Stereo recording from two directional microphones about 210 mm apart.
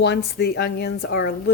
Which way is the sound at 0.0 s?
50° left (ahead or behind).